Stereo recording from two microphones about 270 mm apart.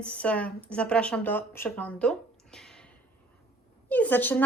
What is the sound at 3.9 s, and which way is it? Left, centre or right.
Speech, centre.